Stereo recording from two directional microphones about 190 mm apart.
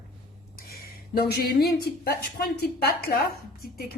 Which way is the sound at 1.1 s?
55° left (ahead or behind).